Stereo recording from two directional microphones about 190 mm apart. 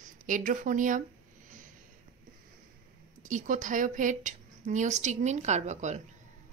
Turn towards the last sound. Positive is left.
turn(degrees=-40)  # may be behind; listen again after turning